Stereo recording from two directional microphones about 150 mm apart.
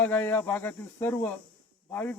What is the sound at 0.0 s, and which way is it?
Speech, 10° left (ahead or behind).